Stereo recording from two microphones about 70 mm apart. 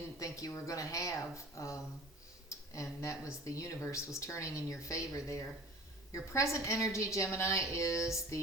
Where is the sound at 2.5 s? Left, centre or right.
Left.